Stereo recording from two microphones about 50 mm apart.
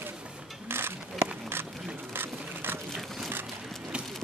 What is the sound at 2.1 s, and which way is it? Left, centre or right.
Clip-clop, right.